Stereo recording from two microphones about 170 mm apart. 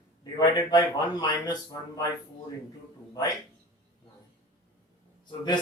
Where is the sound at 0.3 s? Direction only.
20° left (ahead or behind).